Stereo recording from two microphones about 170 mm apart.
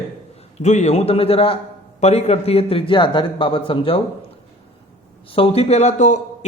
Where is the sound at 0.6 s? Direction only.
45° left (ahead or behind).